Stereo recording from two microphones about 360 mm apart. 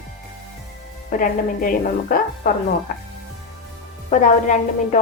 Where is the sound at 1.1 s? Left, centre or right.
Left.